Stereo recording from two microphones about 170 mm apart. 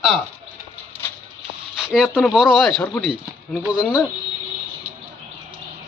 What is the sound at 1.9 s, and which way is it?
Speech, centre (ahead or behind).